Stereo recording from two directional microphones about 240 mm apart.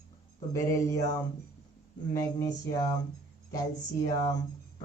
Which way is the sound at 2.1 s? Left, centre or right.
Centre.